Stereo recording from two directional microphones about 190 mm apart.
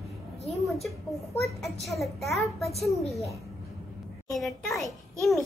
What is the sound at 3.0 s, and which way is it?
Speech, 35° left (ahead or behind).